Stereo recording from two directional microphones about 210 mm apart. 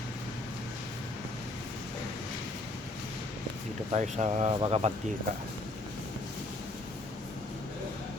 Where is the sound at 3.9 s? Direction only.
35° right (ahead or behind).